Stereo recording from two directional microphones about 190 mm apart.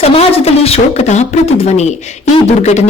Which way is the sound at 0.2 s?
35° left (ahead or behind).